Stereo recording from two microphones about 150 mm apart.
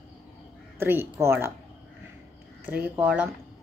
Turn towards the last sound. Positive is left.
turn(degrees=-10)  # may be behind; listen again after turning